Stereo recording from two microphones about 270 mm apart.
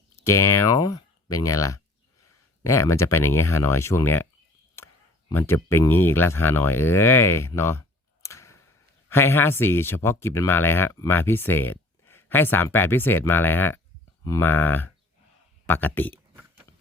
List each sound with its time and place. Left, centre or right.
0.3 s speech: centre
5.3 s speech: centre
16.3 s a sound: centre